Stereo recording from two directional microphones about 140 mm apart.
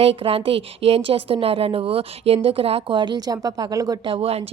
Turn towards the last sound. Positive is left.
turn(degrees=-45)  # may be behind; listen again after turning